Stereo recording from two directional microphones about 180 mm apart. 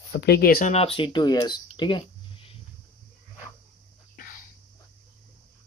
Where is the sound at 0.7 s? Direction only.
30° left (ahead or behind).